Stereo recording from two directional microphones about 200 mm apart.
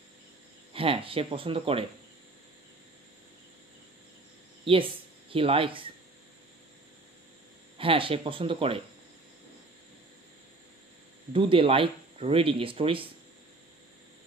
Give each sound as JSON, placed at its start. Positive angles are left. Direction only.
{"t": 0.7, "sound": "speech", "side_deg": -25}
{"t": 4.6, "sound": "speech", "side_deg": -25}
{"t": 7.7, "sound": "speech", "side_deg": -25}
{"t": 11.3, "sound": "speech", "side_deg": -25}